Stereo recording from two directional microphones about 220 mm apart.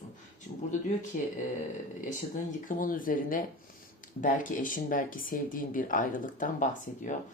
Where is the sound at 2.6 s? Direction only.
40° left (ahead or behind).